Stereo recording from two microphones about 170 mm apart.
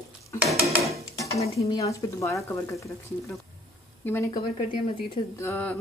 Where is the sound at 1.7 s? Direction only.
20° left (ahead or behind).